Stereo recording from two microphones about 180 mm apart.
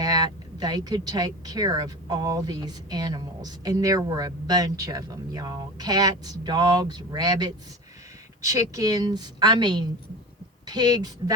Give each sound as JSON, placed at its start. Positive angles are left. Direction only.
{"t": 0.0, "sound": "speech", "side_deg": -20}